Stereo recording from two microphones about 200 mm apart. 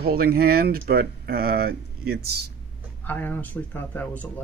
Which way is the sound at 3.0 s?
10° left (ahead or behind).